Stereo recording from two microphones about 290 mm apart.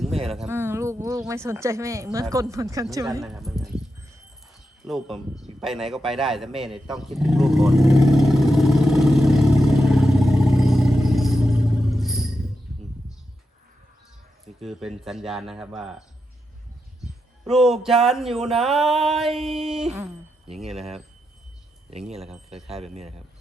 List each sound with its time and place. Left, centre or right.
0.3 s speech: centre
3.2 s a sound: centre
4.8 s speech: centre
5.5 s a sound: centre
14.4 s speech: centre
17.4 s speech: centre
22.5 s speech: centre
22.8 s speech: right